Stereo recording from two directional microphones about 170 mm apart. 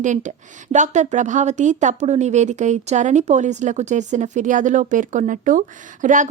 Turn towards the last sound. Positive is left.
turn(degrees=-50)  # may be behind; listen again after turning